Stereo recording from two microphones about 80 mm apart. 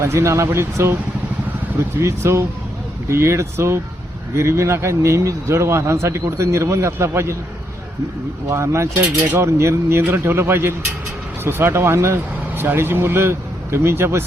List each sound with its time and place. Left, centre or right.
0.0 s speech: right
2.0 s speech: right
8.4 s speech: right